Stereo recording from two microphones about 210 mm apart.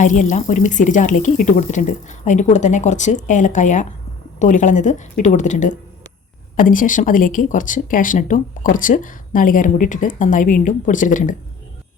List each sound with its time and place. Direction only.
0.0 s speech: 35° left (ahead or behind)